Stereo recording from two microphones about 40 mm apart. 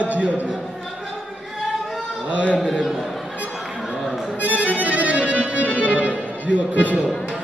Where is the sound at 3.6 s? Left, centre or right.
Centre.